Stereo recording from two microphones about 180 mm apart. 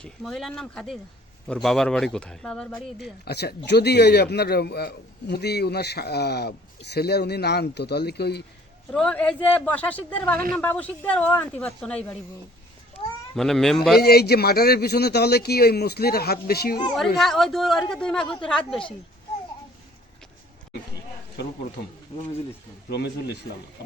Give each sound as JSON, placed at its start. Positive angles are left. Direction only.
{"t": 0.0, "sound": "speech", "side_deg": 0}
{"t": 3.0, "sound": "speech", "side_deg": 65}
{"t": 8.9, "sound": "speech", "side_deg": 5}
{"t": 13.3, "sound": "speech", "side_deg": 0}
{"t": 14.0, "sound": "speech", "side_deg": 60}
{"t": 17.2, "sound": "speech", "side_deg": 0}
{"t": 22.9, "sound": "speech", "side_deg": 70}